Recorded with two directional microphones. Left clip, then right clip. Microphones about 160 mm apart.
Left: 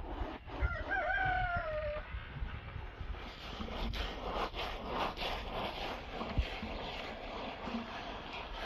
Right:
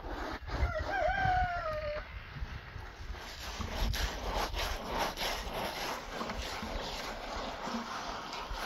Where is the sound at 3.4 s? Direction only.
45° right (ahead or behind).